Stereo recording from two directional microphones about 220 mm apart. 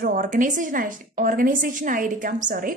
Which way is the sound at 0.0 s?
40° right (ahead or behind).